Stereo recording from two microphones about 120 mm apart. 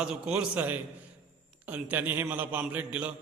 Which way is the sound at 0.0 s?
10° right (ahead or behind).